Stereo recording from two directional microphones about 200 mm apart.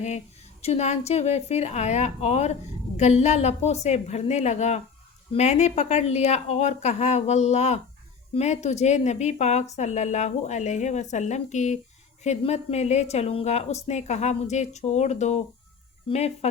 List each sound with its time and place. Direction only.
0.6 s speech: 30° left (ahead or behind)